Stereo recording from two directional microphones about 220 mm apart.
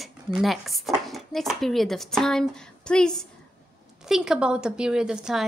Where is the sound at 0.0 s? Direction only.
Centre (ahead or behind).